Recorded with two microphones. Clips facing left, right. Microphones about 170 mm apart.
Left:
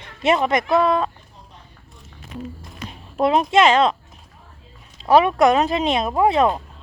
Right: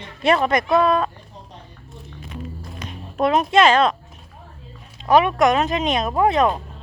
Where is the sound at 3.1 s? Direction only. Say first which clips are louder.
Even; 25° left (ahead or behind).